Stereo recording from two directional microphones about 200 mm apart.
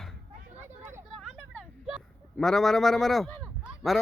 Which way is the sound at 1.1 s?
Centre (ahead or behind).